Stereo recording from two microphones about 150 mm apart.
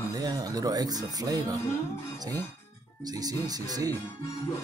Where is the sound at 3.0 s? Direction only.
25° right (ahead or behind).